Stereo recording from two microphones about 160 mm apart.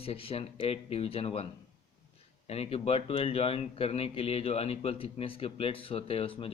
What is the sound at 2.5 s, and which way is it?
A man's voice, 40° left (ahead or behind).